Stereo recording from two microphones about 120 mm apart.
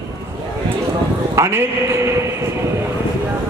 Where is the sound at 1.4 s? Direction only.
20° right (ahead or behind).